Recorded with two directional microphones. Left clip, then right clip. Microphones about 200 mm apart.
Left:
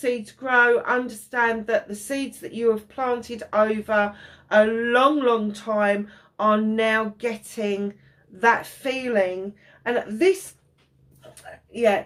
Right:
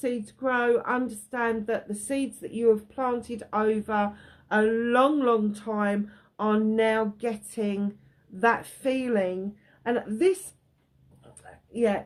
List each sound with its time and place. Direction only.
0.0 s a woman's voice: 50° right (ahead or behind)
11.7 s speech: 50° right (ahead or behind)